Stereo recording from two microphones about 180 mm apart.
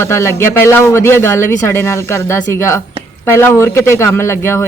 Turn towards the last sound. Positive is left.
turn(degrees=15)  # may be behind; listen again after turning